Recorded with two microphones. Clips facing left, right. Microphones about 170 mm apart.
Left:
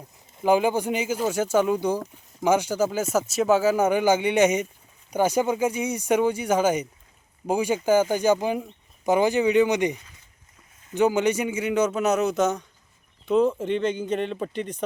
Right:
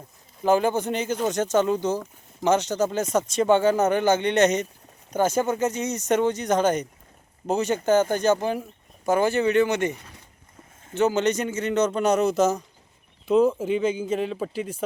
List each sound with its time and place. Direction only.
0.4 s speech: 10° left (ahead or behind)
9.9 s a sound: 65° right (ahead or behind)
10.9 s speech: 15° left (ahead or behind); by 14.8 s 5° right (ahead or behind)